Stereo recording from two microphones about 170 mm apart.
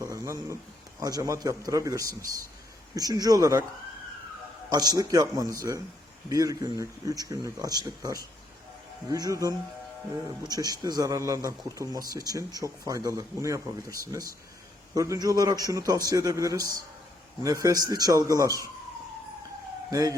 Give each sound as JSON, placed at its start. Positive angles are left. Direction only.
{"t": 0.0, "sound": "a man's voice", "side_deg": -15}
{"t": 4.7, "sound": "speech", "side_deg": -20}
{"t": 10.5, "sound": "speech", "side_deg": -25}
{"t": 19.9, "sound": "speech", "side_deg": -20}